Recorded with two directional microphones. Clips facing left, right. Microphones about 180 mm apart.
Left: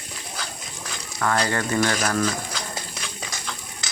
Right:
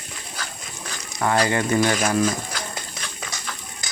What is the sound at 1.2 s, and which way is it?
Speech, 20° right (ahead or behind).